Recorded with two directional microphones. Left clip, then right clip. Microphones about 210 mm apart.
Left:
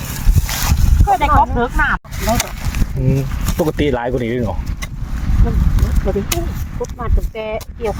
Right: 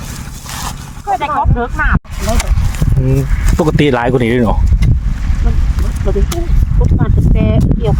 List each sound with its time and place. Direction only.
1.0 s a sound: 10° left (ahead or behind)
1.4 s speech: 10° left (ahead or behind)
3.2 s speech: 30° right (ahead or behind)
6.1 s speech: 10° right (ahead or behind)
7.0 s speech: 20° right (ahead or behind)